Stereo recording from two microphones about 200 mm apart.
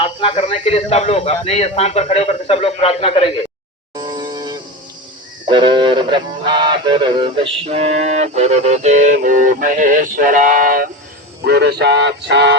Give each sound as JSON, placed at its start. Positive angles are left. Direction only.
{"t": 0.0, "sound": "speech", "side_deg": 25}
{"t": 3.9, "sound": "a sound", "side_deg": -20}
{"t": 5.5, "sound": "music", "side_deg": -25}
{"t": 11.4, "sound": "music", "side_deg": -55}